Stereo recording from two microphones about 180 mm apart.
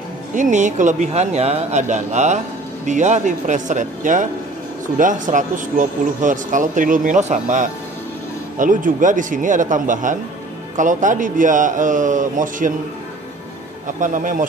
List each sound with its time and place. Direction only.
0.3 s speech: 45° right (ahead or behind)
13.9 s speech: 45° right (ahead or behind)